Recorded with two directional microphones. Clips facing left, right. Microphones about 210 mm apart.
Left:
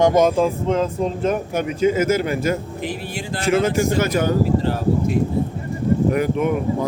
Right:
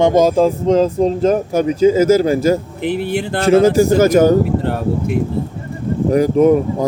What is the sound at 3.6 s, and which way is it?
Speech, 40° right (ahead or behind).